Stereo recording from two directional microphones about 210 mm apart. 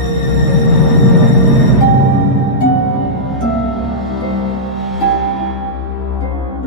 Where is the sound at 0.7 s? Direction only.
Centre (ahead or behind).